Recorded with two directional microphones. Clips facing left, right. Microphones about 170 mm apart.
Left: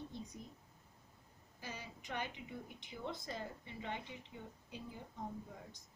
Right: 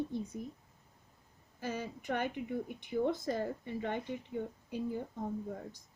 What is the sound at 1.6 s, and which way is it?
Speech, 50° right (ahead or behind).